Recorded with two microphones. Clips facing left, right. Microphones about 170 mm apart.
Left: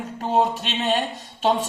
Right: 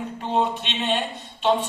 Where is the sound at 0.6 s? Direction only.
40° left (ahead or behind).